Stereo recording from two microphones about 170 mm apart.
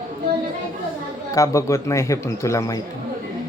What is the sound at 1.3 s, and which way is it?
Speech, 20° left (ahead or behind).